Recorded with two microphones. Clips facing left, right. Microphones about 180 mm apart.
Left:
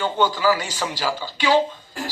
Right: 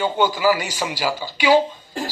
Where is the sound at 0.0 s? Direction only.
10° right (ahead or behind).